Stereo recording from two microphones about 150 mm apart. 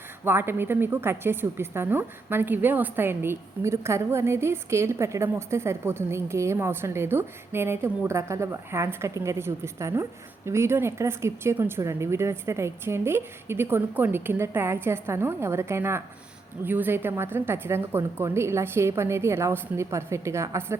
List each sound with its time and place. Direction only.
0.3 s a woman's voice: 15° right (ahead or behind)